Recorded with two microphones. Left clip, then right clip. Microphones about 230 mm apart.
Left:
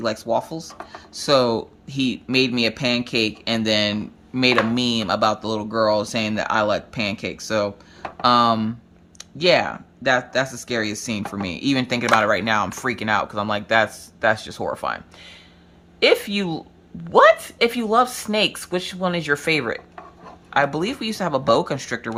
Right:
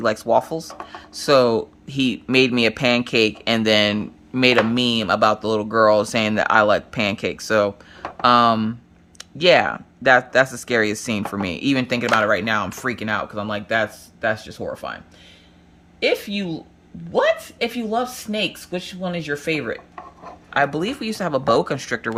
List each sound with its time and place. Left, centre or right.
0.0 s speech: centre
16.0 s speech: centre